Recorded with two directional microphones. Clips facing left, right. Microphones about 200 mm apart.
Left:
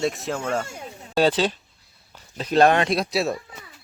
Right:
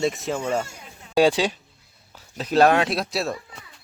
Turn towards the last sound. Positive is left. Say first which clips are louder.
# left 2 dB
turn(degrees=0)  # may be behind; listen again after turning